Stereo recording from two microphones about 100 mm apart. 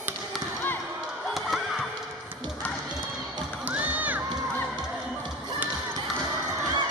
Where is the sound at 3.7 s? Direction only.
15° right (ahead or behind).